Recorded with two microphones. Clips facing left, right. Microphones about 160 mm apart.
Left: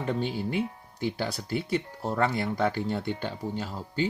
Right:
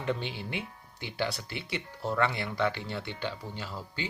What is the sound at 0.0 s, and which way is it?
Speech, 40° left (ahead or behind).